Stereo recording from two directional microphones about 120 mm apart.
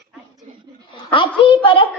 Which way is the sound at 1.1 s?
45° left (ahead or behind).